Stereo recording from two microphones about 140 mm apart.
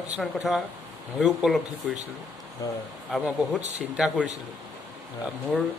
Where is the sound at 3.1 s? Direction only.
10° right (ahead or behind).